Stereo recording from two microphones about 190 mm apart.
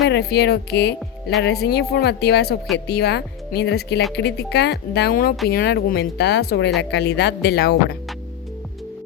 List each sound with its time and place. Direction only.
0.1 s speech: 60° left (ahead or behind)